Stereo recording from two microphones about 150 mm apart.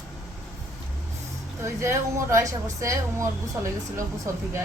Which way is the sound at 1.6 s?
20° right (ahead or behind).